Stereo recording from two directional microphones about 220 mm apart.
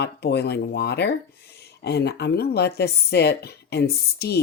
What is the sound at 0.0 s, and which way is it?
Speech, 50° left (ahead or behind).